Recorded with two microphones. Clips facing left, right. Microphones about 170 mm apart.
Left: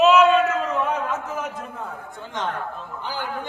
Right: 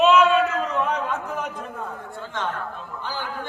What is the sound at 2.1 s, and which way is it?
Speech, 15° left (ahead or behind).